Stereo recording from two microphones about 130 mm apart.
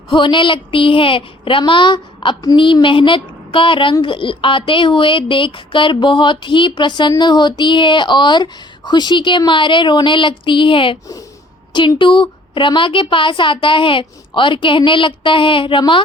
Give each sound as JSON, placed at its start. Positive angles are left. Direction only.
{"t": 0.1, "sound": "a woman's voice", "side_deg": 40}